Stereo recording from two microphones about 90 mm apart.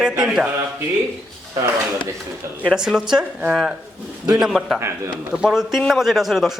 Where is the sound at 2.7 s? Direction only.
5° right (ahead or behind).